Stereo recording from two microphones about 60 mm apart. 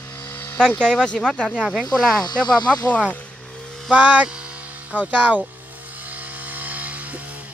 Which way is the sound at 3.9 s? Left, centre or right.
Right.